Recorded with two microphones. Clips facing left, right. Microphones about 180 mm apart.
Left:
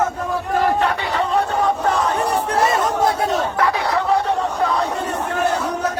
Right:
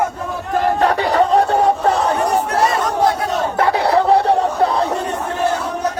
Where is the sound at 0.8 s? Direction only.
40° right (ahead or behind).